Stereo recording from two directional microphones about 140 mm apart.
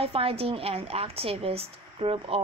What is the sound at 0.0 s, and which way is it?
A woman's voice, 45° right (ahead or behind).